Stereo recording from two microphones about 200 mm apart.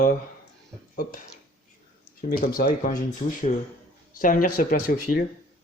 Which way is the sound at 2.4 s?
45° left (ahead or behind).